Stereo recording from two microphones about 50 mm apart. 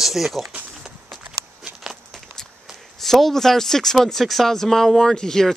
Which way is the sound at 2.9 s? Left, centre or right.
Centre.